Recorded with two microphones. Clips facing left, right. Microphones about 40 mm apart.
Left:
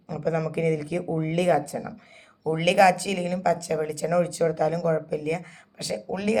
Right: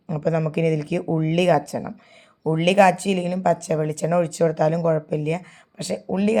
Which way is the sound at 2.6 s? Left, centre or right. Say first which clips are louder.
Right 3 dB; right.